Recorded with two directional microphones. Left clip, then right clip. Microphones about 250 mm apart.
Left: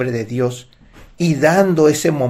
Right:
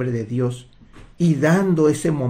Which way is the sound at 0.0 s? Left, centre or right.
Centre.